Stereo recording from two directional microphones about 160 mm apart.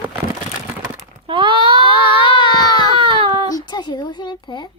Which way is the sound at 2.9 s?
30° right (ahead or behind).